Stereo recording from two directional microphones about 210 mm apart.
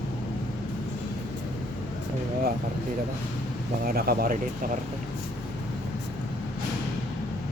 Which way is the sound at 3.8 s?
45° right (ahead or behind).